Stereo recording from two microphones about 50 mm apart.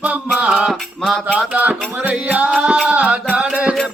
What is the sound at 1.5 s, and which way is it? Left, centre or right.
Music, right.